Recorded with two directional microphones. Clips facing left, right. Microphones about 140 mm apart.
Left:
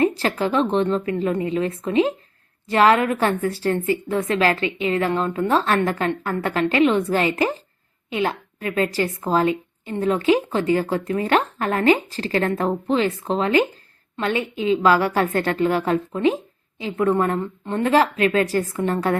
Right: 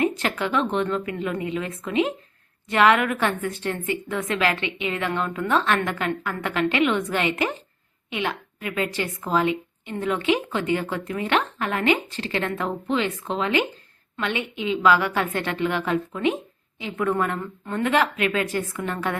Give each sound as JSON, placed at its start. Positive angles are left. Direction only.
{"t": 0.0, "sound": "a woman's voice", "side_deg": 35}